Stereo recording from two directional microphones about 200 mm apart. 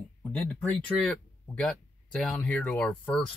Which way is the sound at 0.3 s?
5° left (ahead or behind).